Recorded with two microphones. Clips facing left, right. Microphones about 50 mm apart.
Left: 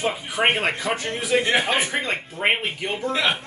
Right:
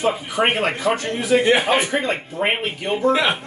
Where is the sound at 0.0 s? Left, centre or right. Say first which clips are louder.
Right 3 dB; centre.